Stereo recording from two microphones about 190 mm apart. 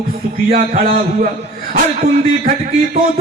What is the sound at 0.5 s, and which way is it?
Speech, 45° right (ahead or behind).